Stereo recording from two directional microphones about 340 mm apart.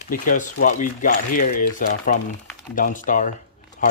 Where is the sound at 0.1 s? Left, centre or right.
Left.